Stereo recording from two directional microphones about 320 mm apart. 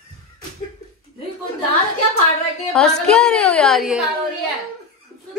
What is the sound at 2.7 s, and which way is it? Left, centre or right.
A woman's voice, centre.